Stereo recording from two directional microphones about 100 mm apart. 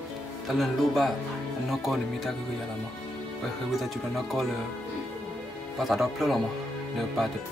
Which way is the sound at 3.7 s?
Centre (ahead or behind).